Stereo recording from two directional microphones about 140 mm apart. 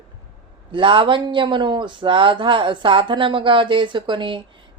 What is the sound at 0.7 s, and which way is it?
Speech, 35° right (ahead or behind).